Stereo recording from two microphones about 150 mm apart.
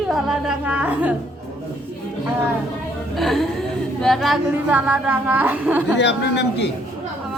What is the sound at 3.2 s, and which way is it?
A woman's voice, centre (ahead or behind).